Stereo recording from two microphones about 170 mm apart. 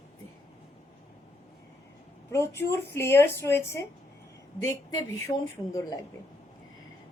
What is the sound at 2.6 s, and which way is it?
A woman's voice, 15° left (ahead or behind).